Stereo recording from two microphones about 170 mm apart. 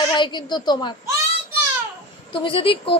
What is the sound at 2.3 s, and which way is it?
Speech, 30° left (ahead or behind).